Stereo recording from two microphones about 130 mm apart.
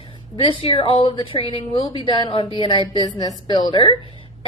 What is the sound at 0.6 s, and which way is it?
A woman's voice, 45° left (ahead or behind).